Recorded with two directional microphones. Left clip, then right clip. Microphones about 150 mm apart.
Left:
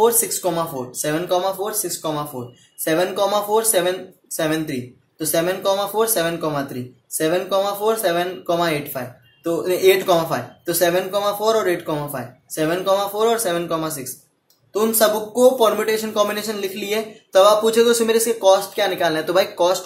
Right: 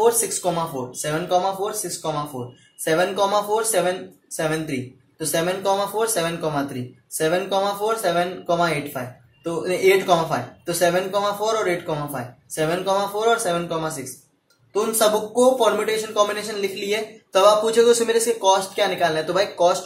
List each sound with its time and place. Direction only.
0.0 s speech: 35° left (ahead or behind)
5.2 s speech: 30° left (ahead or behind)